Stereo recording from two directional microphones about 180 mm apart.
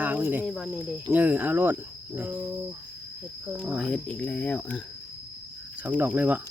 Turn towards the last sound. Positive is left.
turn(degrees=-10)  # may be behind; listen again after turning